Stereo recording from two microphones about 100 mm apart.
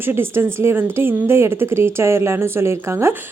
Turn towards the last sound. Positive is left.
turn(degrees=-25)  # may be behind; listen again after turning